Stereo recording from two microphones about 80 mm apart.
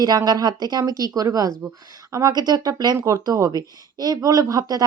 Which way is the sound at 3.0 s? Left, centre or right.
Right.